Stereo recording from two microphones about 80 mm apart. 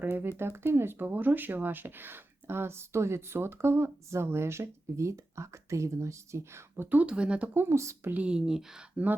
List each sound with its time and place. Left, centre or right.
0.0 s speech: right
6.8 s speech: centre
7.5 s speech: right
7.8 s speech: right
8.1 s speech: centre